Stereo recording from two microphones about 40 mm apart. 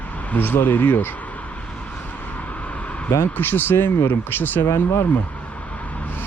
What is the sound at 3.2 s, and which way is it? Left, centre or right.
Speech, left.